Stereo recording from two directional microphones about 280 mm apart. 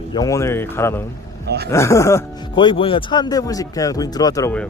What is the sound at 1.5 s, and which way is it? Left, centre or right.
Speech, right.